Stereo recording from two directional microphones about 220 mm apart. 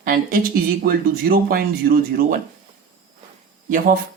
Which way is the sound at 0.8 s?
40° right (ahead or behind).